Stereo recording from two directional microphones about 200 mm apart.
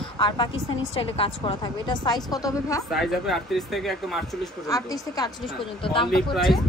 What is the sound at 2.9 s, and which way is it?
Speech, centre (ahead or behind).